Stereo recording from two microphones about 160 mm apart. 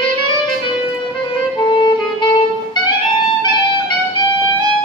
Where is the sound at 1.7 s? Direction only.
30° left (ahead or behind).